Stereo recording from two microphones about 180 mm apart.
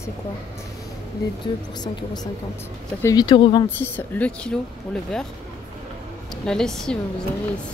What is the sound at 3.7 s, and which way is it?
Speech, 10° left (ahead or behind).